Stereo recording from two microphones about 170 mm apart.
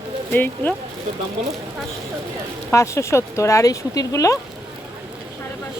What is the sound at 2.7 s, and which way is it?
Speech, 15° left (ahead or behind).